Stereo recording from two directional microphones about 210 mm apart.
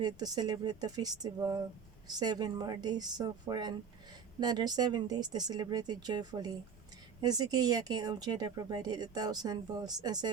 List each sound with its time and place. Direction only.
0.0 s speech: 20° right (ahead or behind)